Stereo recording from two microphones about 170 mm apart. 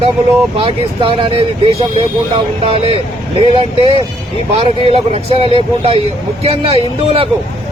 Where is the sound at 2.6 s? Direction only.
35° right (ahead or behind).